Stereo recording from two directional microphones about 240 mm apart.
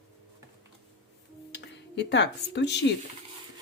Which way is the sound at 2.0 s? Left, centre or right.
Left.